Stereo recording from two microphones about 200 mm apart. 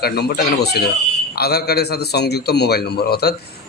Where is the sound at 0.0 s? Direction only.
50° left (ahead or behind).